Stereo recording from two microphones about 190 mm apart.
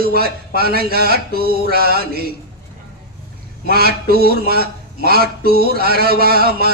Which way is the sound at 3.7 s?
55° right (ahead or behind).